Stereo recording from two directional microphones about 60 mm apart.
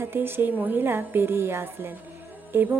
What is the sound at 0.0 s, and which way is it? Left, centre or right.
A woman's voice, right.